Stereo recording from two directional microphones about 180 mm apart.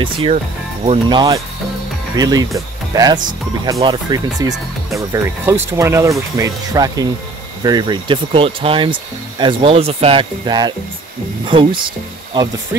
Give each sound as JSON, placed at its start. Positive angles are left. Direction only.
{"t": 0.0, "sound": "speech", "side_deg": -30}